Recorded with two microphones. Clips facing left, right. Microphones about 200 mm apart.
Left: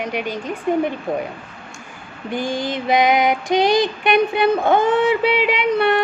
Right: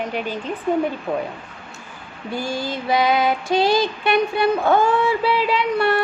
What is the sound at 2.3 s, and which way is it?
Female singing, 15° left (ahead or behind).